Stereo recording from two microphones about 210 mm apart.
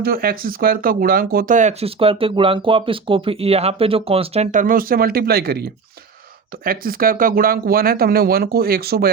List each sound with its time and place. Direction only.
0.0 s speech: 45° right (ahead or behind)